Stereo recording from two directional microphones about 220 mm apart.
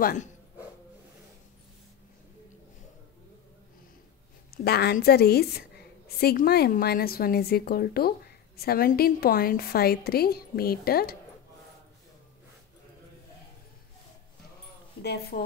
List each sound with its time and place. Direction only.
0.0 s speech: 35° left (ahead or behind)
4.6 s a woman's voice: 45° left (ahead or behind)
15.0 s a woman's voice: 50° left (ahead or behind)